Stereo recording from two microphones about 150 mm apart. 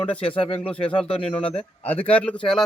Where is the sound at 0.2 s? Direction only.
35° left (ahead or behind).